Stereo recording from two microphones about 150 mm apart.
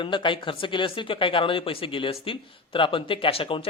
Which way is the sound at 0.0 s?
35° left (ahead or behind).